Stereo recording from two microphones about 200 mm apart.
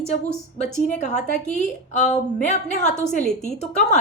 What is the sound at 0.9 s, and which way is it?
A woman's voice, 35° left (ahead or behind).